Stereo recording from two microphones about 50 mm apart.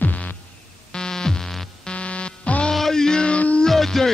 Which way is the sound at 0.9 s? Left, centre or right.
Centre.